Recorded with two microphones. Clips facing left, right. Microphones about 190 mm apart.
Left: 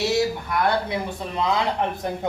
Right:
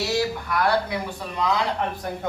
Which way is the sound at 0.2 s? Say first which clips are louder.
Left 1 dB; 20° left (ahead or behind).